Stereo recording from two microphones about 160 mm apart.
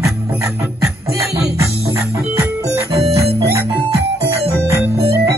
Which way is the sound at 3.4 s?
15° right (ahead or behind).